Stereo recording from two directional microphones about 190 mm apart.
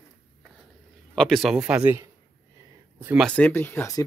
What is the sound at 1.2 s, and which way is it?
A man's voice, centre (ahead or behind).